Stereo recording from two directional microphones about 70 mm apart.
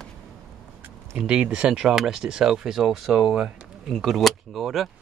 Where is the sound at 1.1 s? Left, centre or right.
Centre.